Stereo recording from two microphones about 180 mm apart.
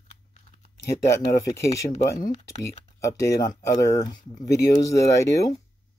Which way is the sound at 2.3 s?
40° left (ahead or behind).